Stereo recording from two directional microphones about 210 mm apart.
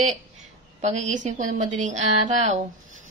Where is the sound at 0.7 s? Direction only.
35° right (ahead or behind).